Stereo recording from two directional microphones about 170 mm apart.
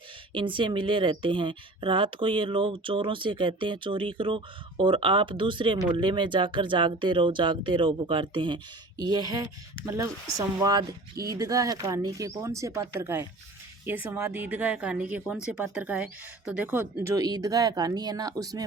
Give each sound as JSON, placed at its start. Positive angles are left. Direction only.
{"t": 0.3, "sound": "a woman's voice", "side_deg": -30}